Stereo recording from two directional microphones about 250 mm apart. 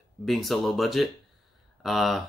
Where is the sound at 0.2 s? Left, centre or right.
Centre.